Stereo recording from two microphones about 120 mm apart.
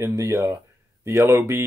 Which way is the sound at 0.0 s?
25° right (ahead or behind).